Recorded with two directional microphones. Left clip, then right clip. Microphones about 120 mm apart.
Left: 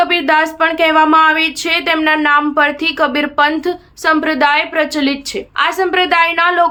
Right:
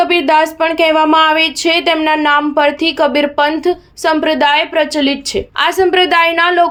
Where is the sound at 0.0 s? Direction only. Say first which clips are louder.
Right 2 dB; 20° right (ahead or behind).